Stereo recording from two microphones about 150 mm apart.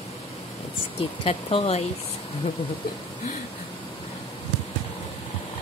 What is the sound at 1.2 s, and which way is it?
Speech, 40° left (ahead or behind).